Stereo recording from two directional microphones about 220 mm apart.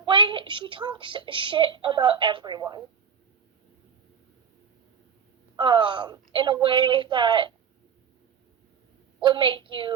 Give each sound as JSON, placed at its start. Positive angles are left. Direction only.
{"t": 0.1, "sound": "a woman's voice", "side_deg": -20}
{"t": 5.5, "sound": "a woman's voice", "side_deg": -20}
{"t": 9.2, "sound": "a woman's voice", "side_deg": -20}